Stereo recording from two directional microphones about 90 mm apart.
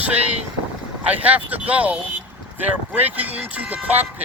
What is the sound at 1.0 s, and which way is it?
Speech, 15° right (ahead or behind).